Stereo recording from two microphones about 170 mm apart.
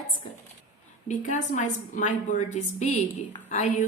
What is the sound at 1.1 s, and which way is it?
A woman's voice, 45° left (ahead or behind).